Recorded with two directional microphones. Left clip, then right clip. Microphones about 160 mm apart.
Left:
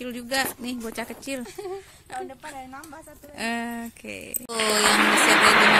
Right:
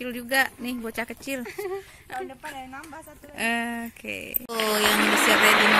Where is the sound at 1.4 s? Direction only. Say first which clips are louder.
Right 2 dB; 75° left (ahead or behind).